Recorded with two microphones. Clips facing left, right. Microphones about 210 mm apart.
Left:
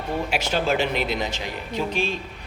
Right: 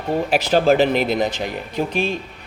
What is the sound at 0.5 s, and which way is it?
A man's voice, 50° right (ahead or behind).